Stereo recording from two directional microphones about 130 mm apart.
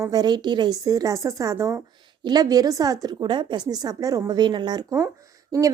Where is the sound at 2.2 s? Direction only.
30° right (ahead or behind).